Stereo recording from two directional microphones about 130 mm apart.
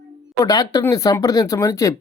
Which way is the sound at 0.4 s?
30° left (ahead or behind).